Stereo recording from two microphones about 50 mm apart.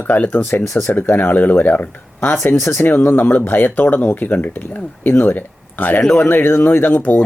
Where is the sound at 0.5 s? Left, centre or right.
Left.